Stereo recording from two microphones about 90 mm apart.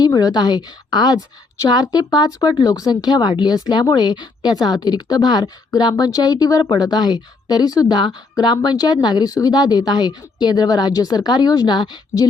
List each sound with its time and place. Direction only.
0.0 s a woman's voice: 45° left (ahead or behind)
5.9 s a woman's voice: 40° left (ahead or behind)
6.7 s a woman's voice: 55° left (ahead or behind)